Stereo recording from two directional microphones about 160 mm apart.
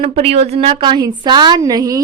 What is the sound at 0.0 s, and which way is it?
A woman's voice, 35° right (ahead or behind).